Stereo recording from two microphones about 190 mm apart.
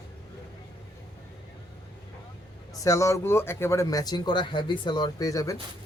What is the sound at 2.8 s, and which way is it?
Speech, 15° left (ahead or behind).